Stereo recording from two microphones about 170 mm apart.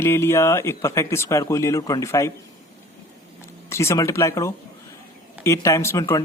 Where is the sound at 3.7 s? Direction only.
15° left (ahead or behind).